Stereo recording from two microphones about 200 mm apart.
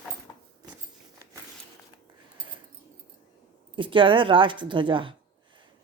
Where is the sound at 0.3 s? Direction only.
15° left (ahead or behind).